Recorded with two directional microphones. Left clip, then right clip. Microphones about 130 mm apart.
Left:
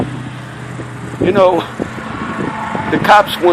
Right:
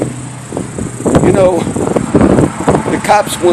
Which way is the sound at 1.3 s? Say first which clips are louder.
Left 3 dB; 15° right (ahead or behind).